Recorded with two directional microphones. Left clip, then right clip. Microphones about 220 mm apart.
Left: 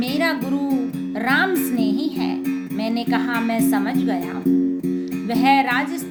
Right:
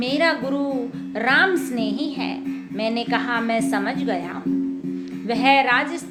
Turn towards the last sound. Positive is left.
turn(degrees=20)  # may be behind; listen again after turning